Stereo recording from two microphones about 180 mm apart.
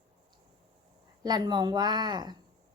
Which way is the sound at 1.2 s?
20° right (ahead or behind).